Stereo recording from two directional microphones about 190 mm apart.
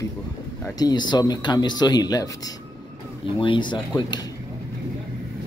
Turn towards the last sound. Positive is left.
turn(degrees=20)  # may be behind; listen again after turning